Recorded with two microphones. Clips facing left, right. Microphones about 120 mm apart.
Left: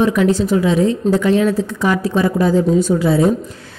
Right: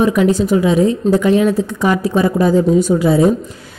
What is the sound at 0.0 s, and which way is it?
A woman's voice, 15° right (ahead or behind).